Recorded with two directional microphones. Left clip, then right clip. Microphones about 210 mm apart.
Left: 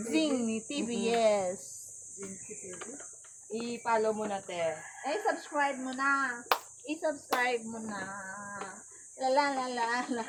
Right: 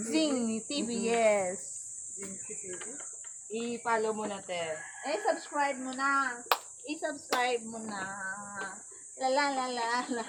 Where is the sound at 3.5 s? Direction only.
30° left (ahead or behind).